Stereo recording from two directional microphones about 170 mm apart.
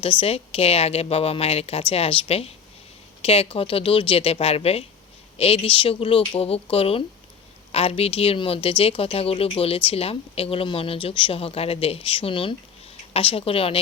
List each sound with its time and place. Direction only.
0.0 s a woman's voice: 35° left (ahead or behind)